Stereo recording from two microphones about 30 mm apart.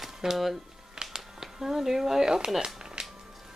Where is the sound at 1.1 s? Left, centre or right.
Centre.